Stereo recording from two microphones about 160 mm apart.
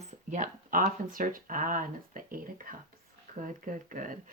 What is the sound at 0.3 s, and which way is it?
Speech, 55° right (ahead or behind).